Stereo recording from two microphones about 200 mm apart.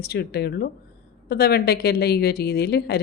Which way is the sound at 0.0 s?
50° left (ahead or behind).